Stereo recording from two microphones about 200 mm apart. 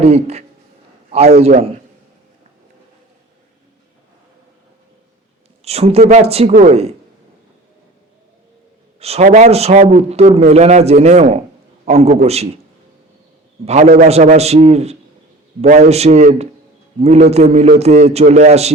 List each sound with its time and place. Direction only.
0.0 s a man's voice: 30° right (ahead or behind)
5.6 s a man's voice: 30° right (ahead or behind)
9.0 s a man's voice: 30° right (ahead or behind)
13.7 s a man's voice: 30° right (ahead or behind)